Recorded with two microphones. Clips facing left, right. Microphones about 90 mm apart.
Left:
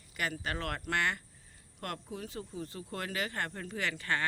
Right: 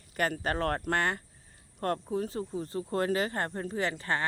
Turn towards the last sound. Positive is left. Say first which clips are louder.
# right 4 dB
turn(degrees=-30)  # may be behind; listen again after turning